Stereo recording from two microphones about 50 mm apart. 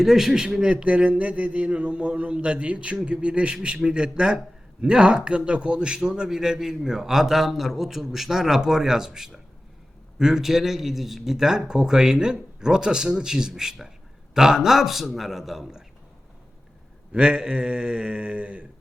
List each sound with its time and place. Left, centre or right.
0.0 s a man's voice: centre
17.1 s mantra: centre